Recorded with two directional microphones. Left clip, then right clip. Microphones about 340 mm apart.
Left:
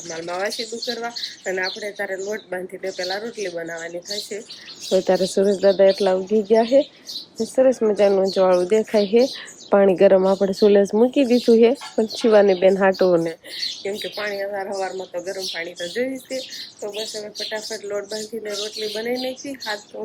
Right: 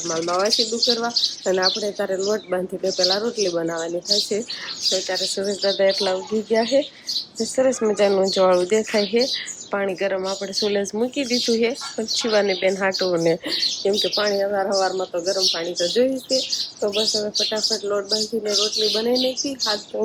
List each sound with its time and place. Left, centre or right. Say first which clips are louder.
0.3 s speech: right 3 dB; centre
0.8 s speech: right 7 dB; left
1.5 s speech: right 1 dB; centre
4.9 s speech: left 4 dB; centre
13.8 s speech: right 8 dB; centre